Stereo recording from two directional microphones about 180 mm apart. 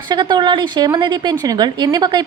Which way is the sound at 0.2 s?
25° right (ahead or behind).